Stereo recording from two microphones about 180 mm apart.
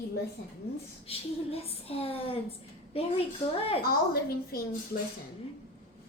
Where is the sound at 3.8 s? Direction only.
60° left (ahead or behind).